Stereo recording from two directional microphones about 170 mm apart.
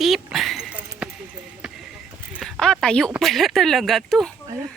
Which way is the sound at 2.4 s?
5° left (ahead or behind).